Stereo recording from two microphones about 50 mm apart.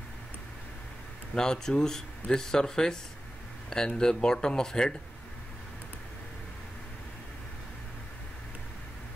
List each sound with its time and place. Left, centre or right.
1.3 s speech: centre